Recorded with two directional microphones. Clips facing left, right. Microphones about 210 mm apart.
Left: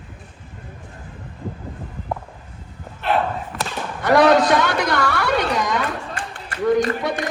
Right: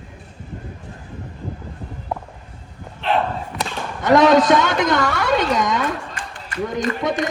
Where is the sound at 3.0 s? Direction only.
5° left (ahead or behind).